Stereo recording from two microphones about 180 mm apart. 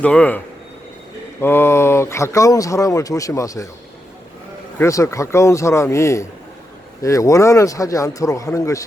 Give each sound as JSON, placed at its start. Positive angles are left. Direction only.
{"t": 0.0, "sound": "speech", "side_deg": 5}
{"t": 4.8, "sound": "speech", "side_deg": 15}